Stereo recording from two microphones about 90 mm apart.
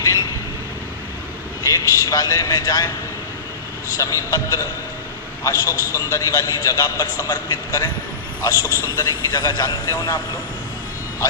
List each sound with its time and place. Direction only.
0.0 s vehicle: 40° left (ahead or behind)
1.6 s a man's voice: 40° left (ahead or behind)
3.9 s a man's voice: 40° left (ahead or behind)
8.6 s a man's voice: 30° right (ahead or behind)
9.0 s a man's voice: 50° left (ahead or behind)